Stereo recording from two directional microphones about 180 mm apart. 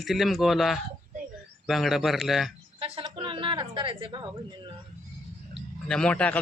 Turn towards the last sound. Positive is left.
turn(degrees=5)  # may be behind; listen again after turning